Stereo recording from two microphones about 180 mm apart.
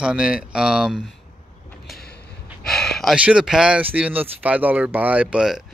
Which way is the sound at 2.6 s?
5° left (ahead or behind).